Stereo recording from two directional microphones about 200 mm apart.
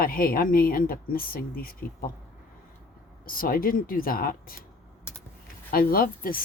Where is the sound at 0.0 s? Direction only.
45° left (ahead or behind).